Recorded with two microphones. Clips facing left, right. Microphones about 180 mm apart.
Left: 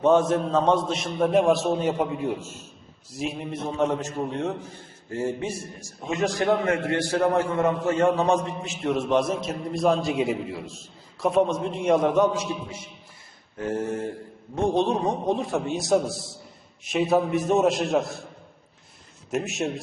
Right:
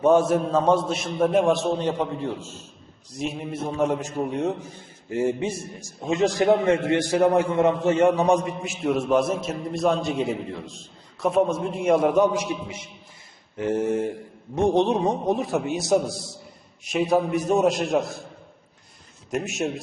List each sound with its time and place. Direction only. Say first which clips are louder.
0.0 s a man's voice: right 1 dB; 10° right (ahead or behind); by 2.5 s 10° left (ahead or behind)
3.1 s a man's voice: right 1 dB; centre (ahead or behind); by 12.8 s 15° right (ahead or behind)
13.8 s a man's voice: right 5 dB; 20° right (ahead or behind)
15.0 s a man's voice: right 2 dB; 5° right (ahead or behind)
19.3 s a man's voice: right 1 dB; centre (ahead or behind)